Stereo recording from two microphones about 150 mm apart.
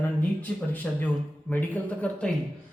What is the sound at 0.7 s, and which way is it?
A man's voice, 10° left (ahead or behind).